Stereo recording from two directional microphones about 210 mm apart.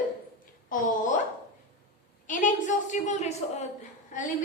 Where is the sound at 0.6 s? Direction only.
40° left (ahead or behind).